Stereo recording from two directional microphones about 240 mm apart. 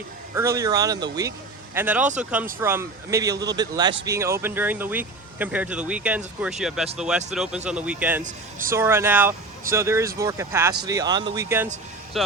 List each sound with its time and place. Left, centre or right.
0.3 s speech: centre
8.2 s speech: right
8.7 s speech: centre
12.1 s speech: centre